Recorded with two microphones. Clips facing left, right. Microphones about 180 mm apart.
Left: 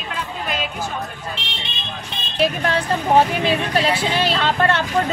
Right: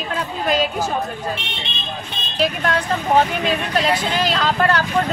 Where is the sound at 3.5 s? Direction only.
5° left (ahead or behind).